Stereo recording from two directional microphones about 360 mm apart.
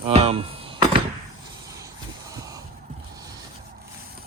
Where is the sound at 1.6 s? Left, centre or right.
Centre.